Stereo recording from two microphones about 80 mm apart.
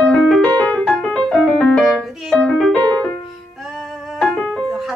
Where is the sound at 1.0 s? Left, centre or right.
Centre.